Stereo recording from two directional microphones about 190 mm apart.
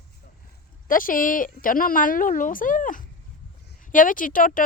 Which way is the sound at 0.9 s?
45° left (ahead or behind).